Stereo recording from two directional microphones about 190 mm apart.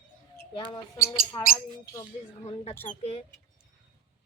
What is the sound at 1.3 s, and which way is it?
Speech, 20° left (ahead or behind).